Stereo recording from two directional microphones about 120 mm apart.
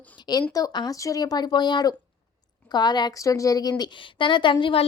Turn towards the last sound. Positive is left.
turn(degrees=45)  # may be behind; listen again after turning